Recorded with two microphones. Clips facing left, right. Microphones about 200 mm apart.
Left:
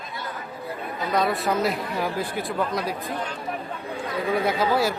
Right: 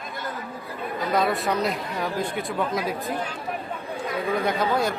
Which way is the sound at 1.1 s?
Centre (ahead or behind).